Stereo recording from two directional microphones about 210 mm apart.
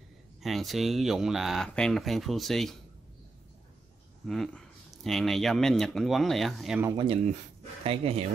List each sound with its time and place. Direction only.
0.4 s speech: centre (ahead or behind)
4.3 s speech: centre (ahead or behind)
7.0 s speech: 25° right (ahead or behind)